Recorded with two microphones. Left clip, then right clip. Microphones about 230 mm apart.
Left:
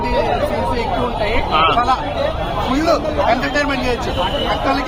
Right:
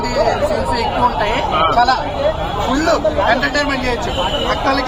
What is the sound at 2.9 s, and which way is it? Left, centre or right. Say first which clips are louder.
Speech: right 2 dB; centre.